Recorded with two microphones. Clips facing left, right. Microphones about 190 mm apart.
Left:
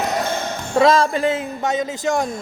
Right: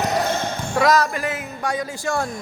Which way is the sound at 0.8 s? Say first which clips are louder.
Left 4 dB; 25° left (ahead or behind).